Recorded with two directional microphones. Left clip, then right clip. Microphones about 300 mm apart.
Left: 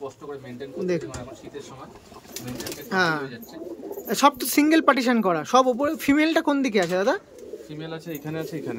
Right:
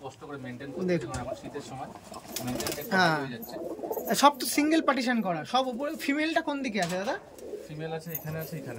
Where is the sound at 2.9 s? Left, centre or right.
Centre.